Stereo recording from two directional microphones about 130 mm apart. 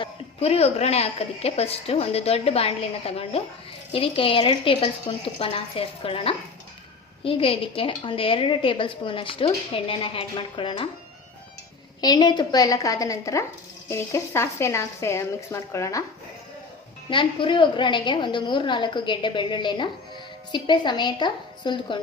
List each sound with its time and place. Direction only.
0.0 s a woman's voice: 50° left (ahead or behind)
11.9 s speech: 30° left (ahead or behind)
17.1 s a woman's voice: 40° left (ahead or behind)